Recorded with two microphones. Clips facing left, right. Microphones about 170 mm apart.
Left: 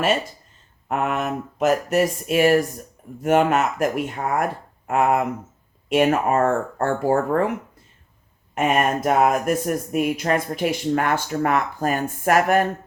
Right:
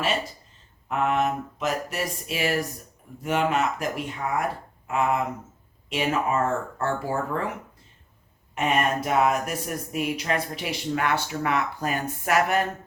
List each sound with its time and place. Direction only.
0.9 s speech: 50° left (ahead or behind)
8.5 s speech: 50° left (ahead or behind)